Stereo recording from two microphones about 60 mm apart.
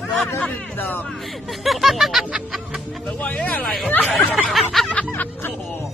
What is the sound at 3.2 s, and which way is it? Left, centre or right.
Speech, left.